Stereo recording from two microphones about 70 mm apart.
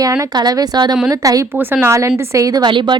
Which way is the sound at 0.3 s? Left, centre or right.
Right.